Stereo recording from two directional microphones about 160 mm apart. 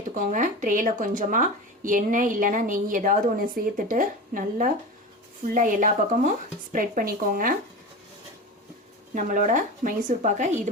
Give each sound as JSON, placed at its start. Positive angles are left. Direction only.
{"t": 0.1, "sound": "speech", "side_deg": -50}
{"t": 9.1, "sound": "speech", "side_deg": -55}